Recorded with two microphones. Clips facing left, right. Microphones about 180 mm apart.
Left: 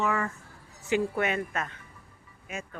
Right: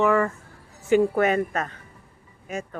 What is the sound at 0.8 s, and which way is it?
A woman's voice, 50° right (ahead or behind).